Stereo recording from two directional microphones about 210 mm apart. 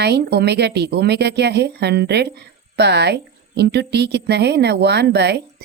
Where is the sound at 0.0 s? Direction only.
50° right (ahead or behind).